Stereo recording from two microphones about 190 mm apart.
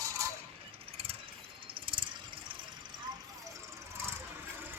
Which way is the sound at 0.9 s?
30° right (ahead or behind).